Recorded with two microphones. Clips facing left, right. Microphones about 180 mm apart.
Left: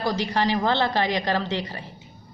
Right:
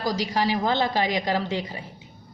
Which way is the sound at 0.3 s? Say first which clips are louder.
Left 1 dB; 10° right (ahead or behind).